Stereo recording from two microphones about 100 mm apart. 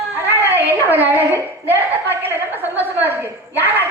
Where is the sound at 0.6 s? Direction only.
20° right (ahead or behind).